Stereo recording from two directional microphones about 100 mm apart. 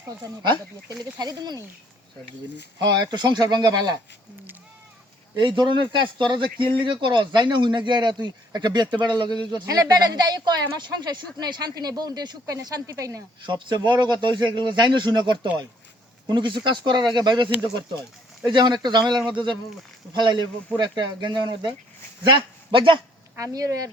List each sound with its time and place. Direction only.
0.9 s speech: 40° right (ahead or behind)
2.7 s speech: 45° right (ahead or behind)
5.4 s speech: 55° right (ahead or behind)
9.6 s speech: 35° right (ahead or behind)
13.4 s a man's voice: 50° right (ahead or behind)
23.4 s speech: 35° right (ahead or behind)